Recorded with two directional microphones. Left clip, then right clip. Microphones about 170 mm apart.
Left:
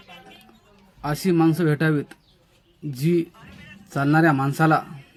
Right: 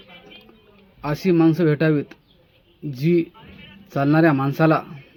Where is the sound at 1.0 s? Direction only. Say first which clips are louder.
Right 2 dB; 10° left (ahead or behind).